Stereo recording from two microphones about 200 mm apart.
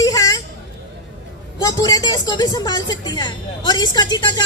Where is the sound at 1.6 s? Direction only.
20° left (ahead or behind).